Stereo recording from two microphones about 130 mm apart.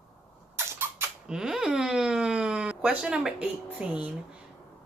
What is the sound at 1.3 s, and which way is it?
Speech, 5° right (ahead or behind).